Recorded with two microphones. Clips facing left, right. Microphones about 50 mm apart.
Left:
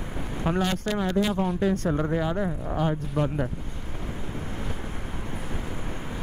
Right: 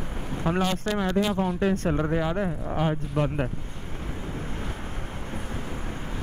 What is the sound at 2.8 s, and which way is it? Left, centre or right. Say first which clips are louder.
Speech: even; right.